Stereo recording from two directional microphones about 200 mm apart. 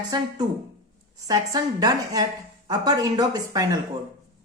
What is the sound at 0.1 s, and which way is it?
Speech, 20° right (ahead or behind).